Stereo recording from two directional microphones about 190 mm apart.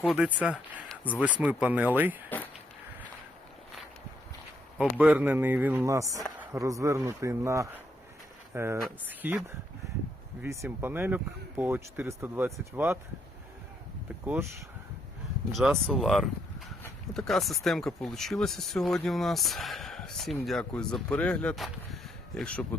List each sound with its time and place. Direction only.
0.0 s speech: centre (ahead or behind)
4.8 s speech: 10° right (ahead or behind)
10.4 s speech: 15° right (ahead or behind)
15.5 s speech: centre (ahead or behind)